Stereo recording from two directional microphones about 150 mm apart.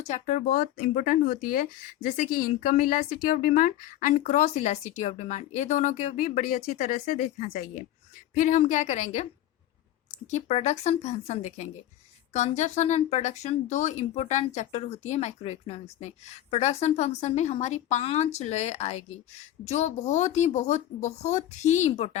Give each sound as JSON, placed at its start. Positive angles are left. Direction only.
{"t": 0.0, "sound": "a woman's voice", "side_deg": 55}
{"t": 10.2, "sound": "speech", "side_deg": 50}